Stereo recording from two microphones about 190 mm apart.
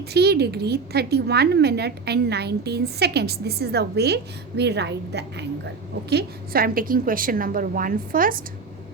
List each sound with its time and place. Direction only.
0.1 s a woman's voice: 60° right (ahead or behind)